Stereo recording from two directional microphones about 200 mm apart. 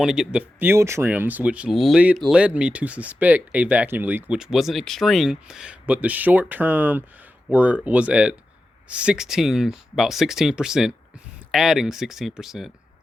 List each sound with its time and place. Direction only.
0.0 s speech: 5° right (ahead or behind)